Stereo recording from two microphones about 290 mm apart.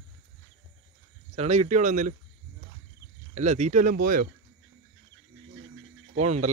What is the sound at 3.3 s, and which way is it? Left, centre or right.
Speech, right.